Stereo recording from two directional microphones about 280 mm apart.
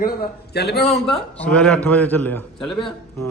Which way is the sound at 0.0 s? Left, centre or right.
Left.